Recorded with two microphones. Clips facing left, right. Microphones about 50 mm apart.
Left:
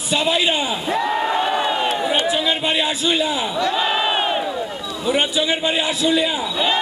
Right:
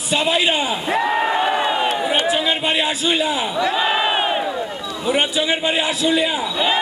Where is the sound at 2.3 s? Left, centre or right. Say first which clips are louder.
Right 1 dB; centre.